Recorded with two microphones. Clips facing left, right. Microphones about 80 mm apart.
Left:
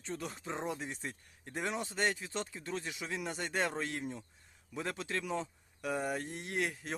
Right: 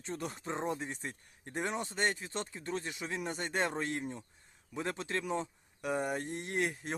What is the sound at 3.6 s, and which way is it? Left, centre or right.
Speech, centre.